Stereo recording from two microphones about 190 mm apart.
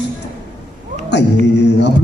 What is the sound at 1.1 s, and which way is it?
Speech, 65° left (ahead or behind).